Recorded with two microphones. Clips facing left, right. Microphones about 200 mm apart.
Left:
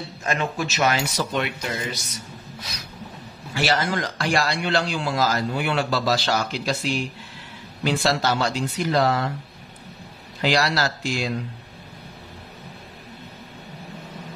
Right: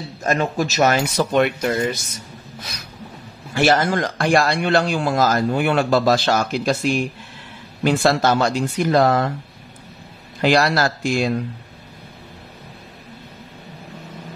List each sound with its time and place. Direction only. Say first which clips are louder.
0.2 s a man's voice: right 6 dB; 40° right (ahead or behind)
3.5 s a man's voice: right 6 dB; 50° right (ahead or behind)
10.4 s a man's voice: right 5 dB; 55° right (ahead or behind)